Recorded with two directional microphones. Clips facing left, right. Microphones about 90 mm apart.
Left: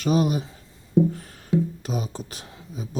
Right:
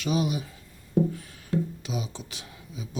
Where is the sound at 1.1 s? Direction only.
45° left (ahead or behind).